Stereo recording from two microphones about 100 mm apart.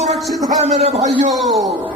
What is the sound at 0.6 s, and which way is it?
Speech, 90° right.